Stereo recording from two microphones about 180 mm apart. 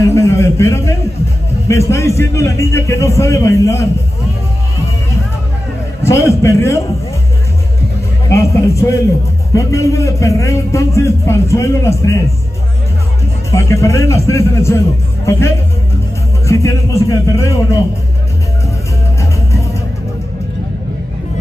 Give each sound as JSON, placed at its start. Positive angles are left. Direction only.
{"t": 0.0, "sound": "a sound", "side_deg": 15}
{"t": 1.7, "sound": "a man's voice", "side_deg": 15}
{"t": 6.0, "sound": "a man's voice", "side_deg": 15}
{"t": 8.3, "sound": "a man's voice", "side_deg": 15}
{"t": 13.5, "sound": "a man's voice", "side_deg": 15}